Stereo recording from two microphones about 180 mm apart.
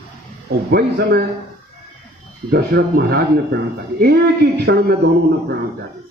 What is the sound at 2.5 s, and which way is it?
A man's voice, 60° right (ahead or behind).